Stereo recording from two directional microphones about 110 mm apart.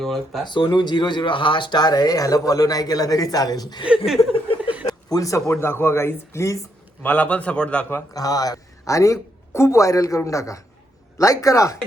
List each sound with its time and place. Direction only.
0.0 s speech: centre (ahead or behind)
0.4 s speech: 45° left (ahead or behind)
3.8 s speech: 5° right (ahead or behind)
4.2 s a sound: 55° left (ahead or behind)
4.9 s speech: 35° left (ahead or behind)
7.0 s a man's voice: 15° left (ahead or behind)
8.1 s speech: 35° left (ahead or behind)